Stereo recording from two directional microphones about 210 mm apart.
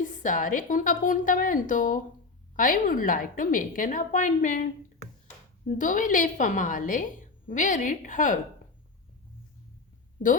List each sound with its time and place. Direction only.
0.0 s a woman's voice: 40° left (ahead or behind)
5.7 s a woman's voice: 40° left (ahead or behind)